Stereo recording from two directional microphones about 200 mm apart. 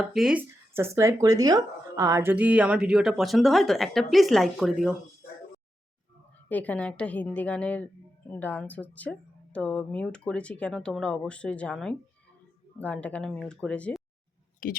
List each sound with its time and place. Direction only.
0.0 s speech: centre (ahead or behind)
6.5 s a woman's voice: 10° left (ahead or behind)
14.6 s speech: 45° left (ahead or behind)